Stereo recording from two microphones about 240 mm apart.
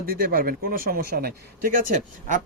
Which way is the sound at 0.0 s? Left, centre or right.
Right.